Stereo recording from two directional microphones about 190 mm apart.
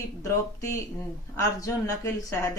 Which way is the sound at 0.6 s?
15° left (ahead or behind).